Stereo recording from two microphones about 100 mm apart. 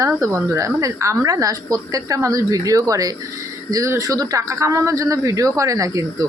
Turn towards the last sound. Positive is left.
turn(degrees=-35)  # may be behind; listen again after turning